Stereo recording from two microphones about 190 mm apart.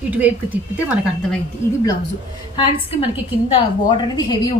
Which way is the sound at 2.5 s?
30° left (ahead or behind).